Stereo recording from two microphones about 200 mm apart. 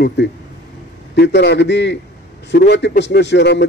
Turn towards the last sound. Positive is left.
turn(degrees=60)  # may be behind; listen again after turning